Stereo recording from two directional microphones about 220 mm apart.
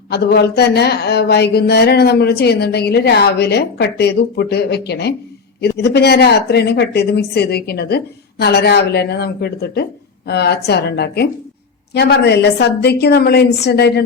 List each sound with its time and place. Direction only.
0.1 s speech: 50° left (ahead or behind)